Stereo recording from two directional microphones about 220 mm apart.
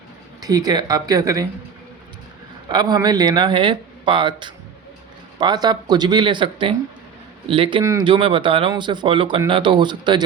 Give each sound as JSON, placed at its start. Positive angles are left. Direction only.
{"t": 0.4, "sound": "speech", "side_deg": -15}
{"t": 2.6, "sound": "speech", "side_deg": -20}